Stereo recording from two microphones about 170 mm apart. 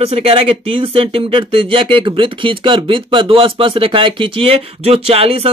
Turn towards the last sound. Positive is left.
turn(degrees=-35)  # may be behind; listen again after turning